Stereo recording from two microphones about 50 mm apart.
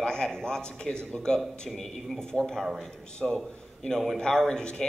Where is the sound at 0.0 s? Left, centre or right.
Centre.